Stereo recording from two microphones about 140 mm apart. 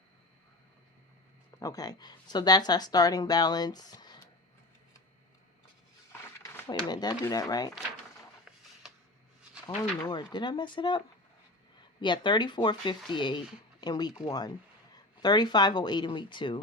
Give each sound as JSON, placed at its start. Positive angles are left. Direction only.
{"t": 1.5, "sound": "speech", "side_deg": 25}
{"t": 6.4, "sound": "speech", "side_deg": 30}
{"t": 9.6, "sound": "speech", "side_deg": 30}